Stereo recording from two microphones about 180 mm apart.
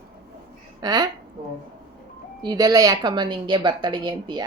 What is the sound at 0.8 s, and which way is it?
Speech, 20° right (ahead or behind).